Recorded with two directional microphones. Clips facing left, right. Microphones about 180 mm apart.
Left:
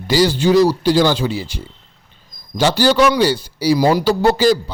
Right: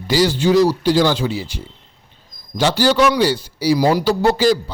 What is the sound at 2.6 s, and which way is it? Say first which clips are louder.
Speech: left 1 dB; 35° left (ahead or behind).